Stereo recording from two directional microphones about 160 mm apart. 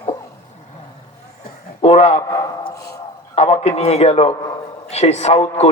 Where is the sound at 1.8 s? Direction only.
40° left (ahead or behind).